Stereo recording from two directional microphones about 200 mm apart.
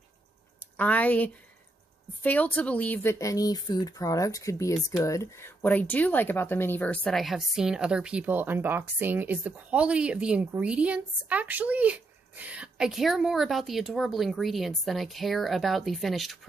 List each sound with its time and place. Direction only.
0.7 s speech: 10° left (ahead or behind)